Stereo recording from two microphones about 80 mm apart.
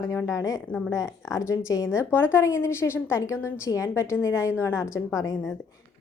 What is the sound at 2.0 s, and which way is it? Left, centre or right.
Speech, left.